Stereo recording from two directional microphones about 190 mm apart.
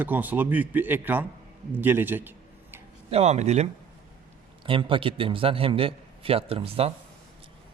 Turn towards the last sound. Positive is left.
turn(degrees=-30)  # may be behind; listen again after turning